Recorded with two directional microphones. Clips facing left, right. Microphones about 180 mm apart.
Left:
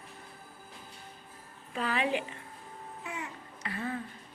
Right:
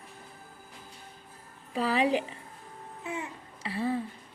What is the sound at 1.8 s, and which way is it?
Speech, 35° right (ahead or behind).